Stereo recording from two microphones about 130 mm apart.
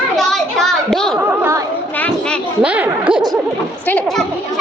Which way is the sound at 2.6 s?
10° right (ahead or behind).